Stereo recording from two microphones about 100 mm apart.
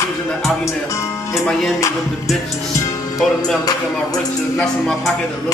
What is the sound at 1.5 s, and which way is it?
Music, 5° left (ahead or behind).